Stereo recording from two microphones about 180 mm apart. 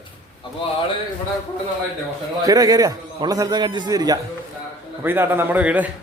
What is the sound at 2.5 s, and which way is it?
A man's voice, 20° right (ahead or behind).